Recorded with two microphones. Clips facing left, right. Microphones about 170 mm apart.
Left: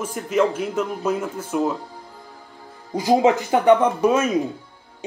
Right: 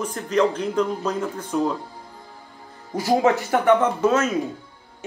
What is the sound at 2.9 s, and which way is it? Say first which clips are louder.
A man's voice: left 2 dB; 15° left (ahead or behind).